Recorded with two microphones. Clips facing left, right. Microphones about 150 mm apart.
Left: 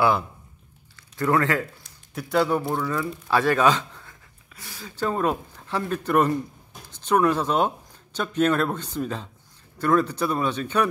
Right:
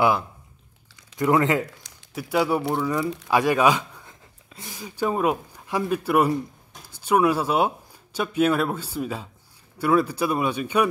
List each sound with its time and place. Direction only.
0.9 s speech: 15° right (ahead or behind)
2.1 s speech: 10° right (ahead or behind)